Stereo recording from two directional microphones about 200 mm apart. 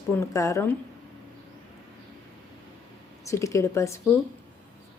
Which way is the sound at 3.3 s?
15° left (ahead or behind).